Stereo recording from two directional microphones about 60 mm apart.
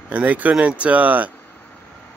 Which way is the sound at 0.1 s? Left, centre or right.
Right.